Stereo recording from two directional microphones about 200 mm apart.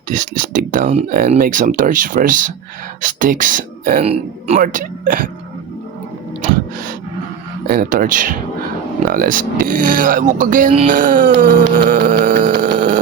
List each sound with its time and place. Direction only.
0.1 s speech: 40° right (ahead or behind)
4.0 s speech: 30° right (ahead or behind)
7.7 s speech: 45° right (ahead or behind)
12.5 s a sound: 45° right (ahead or behind)